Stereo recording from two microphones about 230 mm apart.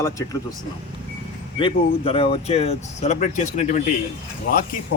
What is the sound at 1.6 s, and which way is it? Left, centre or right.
Speech, left.